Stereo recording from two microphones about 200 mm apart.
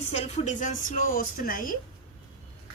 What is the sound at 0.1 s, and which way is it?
Speech, 35° left (ahead or behind).